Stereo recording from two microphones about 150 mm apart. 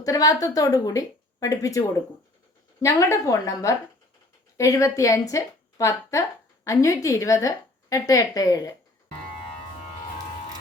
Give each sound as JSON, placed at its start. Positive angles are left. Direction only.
{"t": 0.0, "sound": "a woman's voice", "side_deg": 25}
{"t": 2.8, "sound": "a woman's voice", "side_deg": 20}